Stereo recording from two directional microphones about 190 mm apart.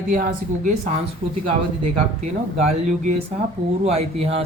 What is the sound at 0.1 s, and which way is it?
Speech, 45° right (ahead or behind).